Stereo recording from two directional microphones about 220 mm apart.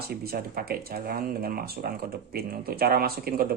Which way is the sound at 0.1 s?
45° right (ahead or behind).